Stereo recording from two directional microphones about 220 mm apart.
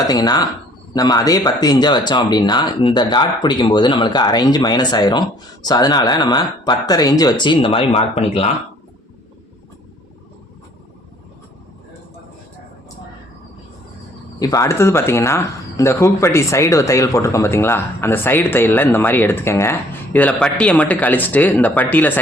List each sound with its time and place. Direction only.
0.1 s speech: 15° left (ahead or behind)
14.3 s speech: 15° left (ahead or behind)